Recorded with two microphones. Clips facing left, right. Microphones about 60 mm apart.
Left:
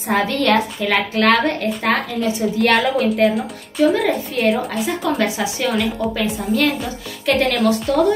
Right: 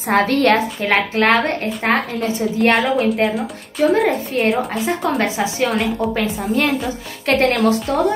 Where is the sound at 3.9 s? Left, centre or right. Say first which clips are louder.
Right 2 dB; right.